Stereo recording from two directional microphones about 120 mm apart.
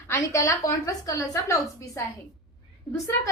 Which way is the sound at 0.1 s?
25° left (ahead or behind).